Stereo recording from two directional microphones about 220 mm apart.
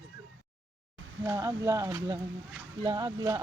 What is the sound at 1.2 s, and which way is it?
Speech, 15° right (ahead or behind).